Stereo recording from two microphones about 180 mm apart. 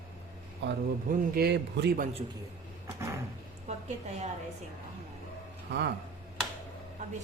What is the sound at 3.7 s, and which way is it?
Speech, 35° right (ahead or behind).